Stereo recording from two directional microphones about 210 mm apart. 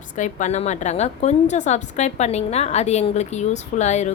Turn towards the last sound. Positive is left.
turn(degrees=35)  # may be behind; listen again after turning